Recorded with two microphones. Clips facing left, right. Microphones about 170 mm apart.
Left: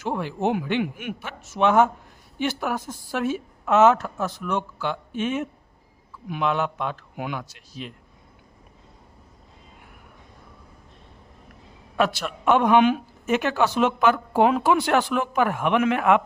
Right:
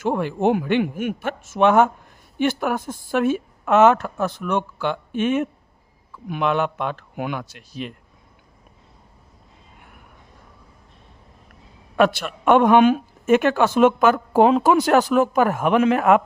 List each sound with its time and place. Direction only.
0.0 s a woman's voice: 55° right (ahead or behind)
11.9 s a man's voice: 55° right (ahead or behind)